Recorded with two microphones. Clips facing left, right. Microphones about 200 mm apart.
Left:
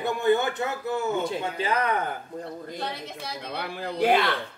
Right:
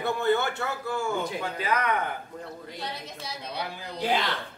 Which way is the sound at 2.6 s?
55° left (ahead or behind).